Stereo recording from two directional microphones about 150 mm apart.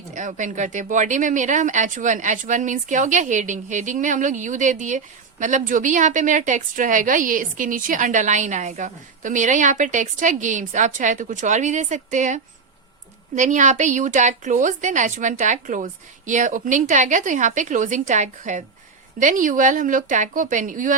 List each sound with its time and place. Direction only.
0.1 s speech: 55° right (ahead or behind)